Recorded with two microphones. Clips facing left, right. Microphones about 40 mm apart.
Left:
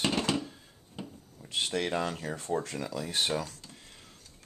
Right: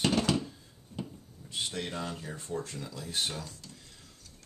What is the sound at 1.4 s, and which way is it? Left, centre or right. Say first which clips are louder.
Speech: left 5 dB; left.